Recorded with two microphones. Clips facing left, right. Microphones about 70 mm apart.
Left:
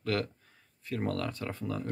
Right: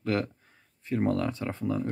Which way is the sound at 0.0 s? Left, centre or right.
Right.